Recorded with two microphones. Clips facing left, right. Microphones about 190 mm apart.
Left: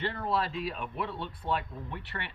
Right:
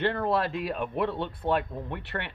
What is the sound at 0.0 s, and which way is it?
Speech, 60° right (ahead or behind).